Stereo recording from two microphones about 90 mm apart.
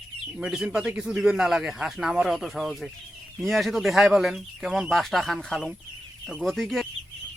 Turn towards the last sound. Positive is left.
turn(degrees=0)  # may be behind; listen again after turning